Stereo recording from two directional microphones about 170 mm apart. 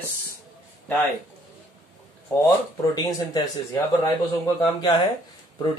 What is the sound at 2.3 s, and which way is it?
Speech, 10° left (ahead or behind).